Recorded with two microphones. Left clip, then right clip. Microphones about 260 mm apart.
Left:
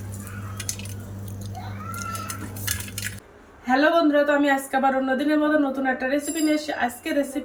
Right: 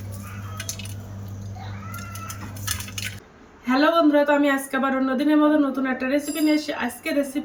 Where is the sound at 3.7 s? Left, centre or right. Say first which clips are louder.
Even; centre.